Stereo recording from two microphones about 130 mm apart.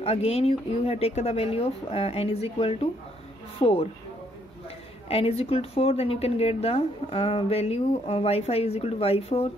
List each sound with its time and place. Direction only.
0.0 s a woman's voice: 50° left (ahead or behind)
5.0 s a woman's voice: 50° left (ahead or behind)